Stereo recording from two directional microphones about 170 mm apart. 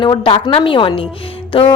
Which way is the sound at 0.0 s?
25° left (ahead or behind).